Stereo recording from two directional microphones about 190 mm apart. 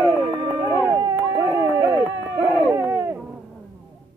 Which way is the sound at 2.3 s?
15° right (ahead or behind).